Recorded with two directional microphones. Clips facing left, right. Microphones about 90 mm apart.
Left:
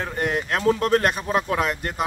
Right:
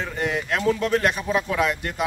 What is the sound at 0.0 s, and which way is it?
Speech, 45° left (ahead or behind).